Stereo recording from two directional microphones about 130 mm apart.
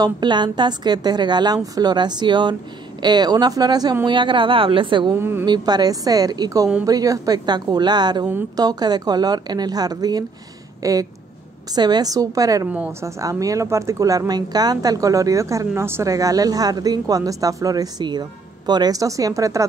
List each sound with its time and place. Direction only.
0.0 s a woman's voice: 35° right (ahead or behind)